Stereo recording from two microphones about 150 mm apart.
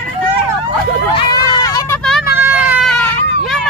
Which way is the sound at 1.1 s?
30° left (ahead or behind).